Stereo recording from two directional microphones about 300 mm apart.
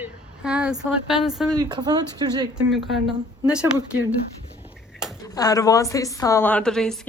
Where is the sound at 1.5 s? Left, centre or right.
Centre.